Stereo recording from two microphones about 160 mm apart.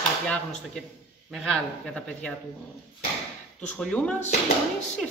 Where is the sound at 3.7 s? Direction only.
5° left (ahead or behind).